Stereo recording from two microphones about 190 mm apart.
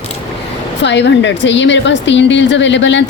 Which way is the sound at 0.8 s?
70° left (ahead or behind).